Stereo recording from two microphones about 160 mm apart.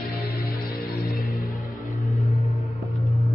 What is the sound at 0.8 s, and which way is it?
Music, 75° left (ahead or behind).